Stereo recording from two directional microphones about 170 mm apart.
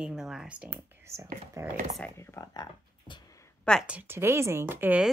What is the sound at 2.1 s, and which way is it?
Speech, 15° left (ahead or behind).